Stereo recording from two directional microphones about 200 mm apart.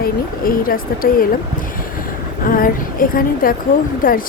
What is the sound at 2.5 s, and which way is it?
Speech, 45° left (ahead or behind).